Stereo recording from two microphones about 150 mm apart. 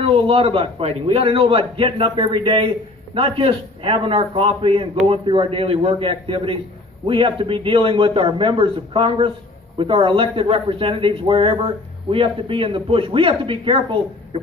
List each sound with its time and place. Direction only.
0.0 s speech: 40° right (ahead or behind)